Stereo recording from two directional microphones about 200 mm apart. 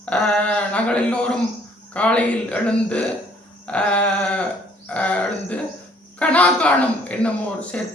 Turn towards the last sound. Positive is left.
turn(degrees=5)  # may be behind; listen again after turning